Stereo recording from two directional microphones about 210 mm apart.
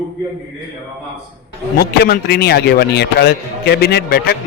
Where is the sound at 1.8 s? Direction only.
45° left (ahead or behind).